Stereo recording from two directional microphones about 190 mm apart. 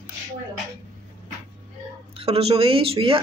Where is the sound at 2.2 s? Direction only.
30° right (ahead or behind).